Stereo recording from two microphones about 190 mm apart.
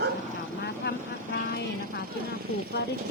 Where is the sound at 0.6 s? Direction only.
60° left (ahead or behind).